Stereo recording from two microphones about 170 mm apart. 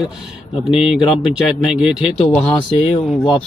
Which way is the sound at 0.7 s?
5° right (ahead or behind).